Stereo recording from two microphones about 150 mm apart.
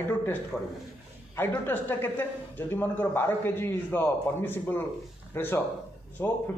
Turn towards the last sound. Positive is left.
turn(degrees=15)  # may be behind; listen again after turning